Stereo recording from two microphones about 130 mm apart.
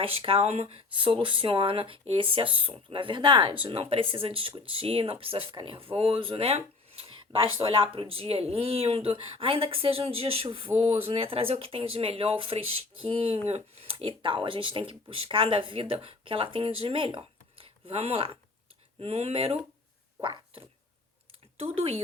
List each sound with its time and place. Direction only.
0.0 s speech: 45° right (ahead or behind)
20.2 s a sound: 40° right (ahead or behind)
21.6 s speech: 50° right (ahead or behind)